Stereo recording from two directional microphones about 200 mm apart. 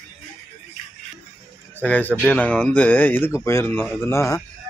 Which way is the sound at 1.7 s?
10° left (ahead or behind).